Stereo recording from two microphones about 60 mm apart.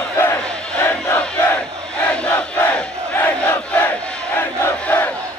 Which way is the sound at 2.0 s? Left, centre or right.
Left.